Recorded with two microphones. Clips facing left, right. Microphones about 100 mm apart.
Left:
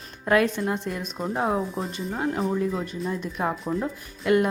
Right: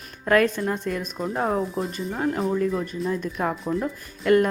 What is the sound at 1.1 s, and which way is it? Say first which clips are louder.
Speech: even; 5° left (ahead or behind).